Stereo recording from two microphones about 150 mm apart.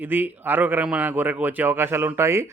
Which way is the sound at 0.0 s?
15° right (ahead or behind).